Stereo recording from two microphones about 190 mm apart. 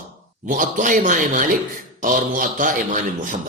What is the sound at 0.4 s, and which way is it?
A man's voice, 45° right (ahead or behind).